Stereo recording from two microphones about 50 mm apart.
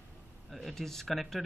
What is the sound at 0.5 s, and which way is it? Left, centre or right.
Speech, centre.